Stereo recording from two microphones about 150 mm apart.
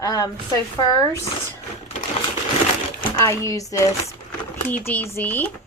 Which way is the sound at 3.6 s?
20° left (ahead or behind).